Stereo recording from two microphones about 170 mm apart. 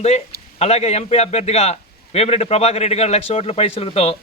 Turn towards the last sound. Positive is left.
turn(degrees=35)  # may be behind; listen again after turning